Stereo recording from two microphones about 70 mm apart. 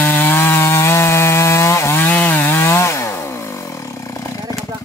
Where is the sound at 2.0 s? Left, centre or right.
Left.